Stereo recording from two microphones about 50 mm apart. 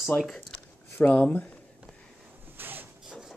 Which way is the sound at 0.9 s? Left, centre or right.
Left.